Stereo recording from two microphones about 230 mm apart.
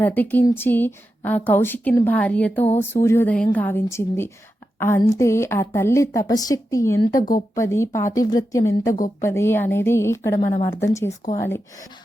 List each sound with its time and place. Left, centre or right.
0.0 s speech: centre
7.2 s speech: left
7.5 s speech: centre